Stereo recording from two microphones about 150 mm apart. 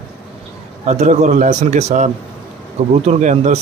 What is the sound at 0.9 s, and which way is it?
A man's voice, 50° right (ahead or behind).